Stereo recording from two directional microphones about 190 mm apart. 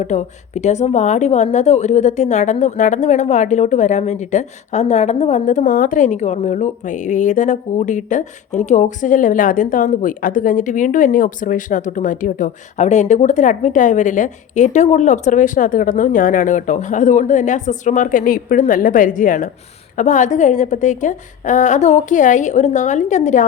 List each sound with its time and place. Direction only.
0.0 s a woman's voice: 40° left (ahead or behind)